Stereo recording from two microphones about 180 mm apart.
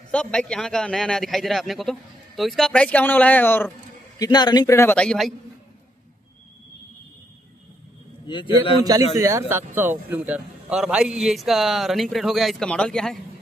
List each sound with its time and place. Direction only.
0.1 s a man's voice: 5° left (ahead or behind)
4.2 s a man's voice: 25° left (ahead or behind)
4.9 s a man's voice: 5° left (ahead or behind)
8.3 s a man's voice: 25° left (ahead or behind)
9.1 s a man's voice: 15° right (ahead or behind); by 13.2 s 5° left (ahead or behind)